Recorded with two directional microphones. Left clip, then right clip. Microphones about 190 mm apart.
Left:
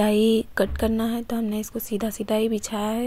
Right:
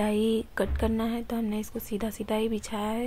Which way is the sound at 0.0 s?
30° left (ahead or behind).